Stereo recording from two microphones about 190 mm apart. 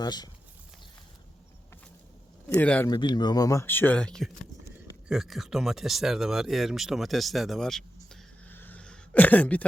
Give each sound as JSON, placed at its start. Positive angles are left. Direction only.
{"t": 0.0, "sound": "speech", "side_deg": 20}
{"t": 2.5, "sound": "speech", "side_deg": 5}
{"t": 2.9, "sound": "speech", "side_deg": 20}